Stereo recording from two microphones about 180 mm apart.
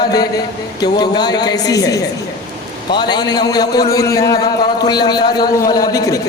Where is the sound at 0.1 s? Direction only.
20° left (ahead or behind).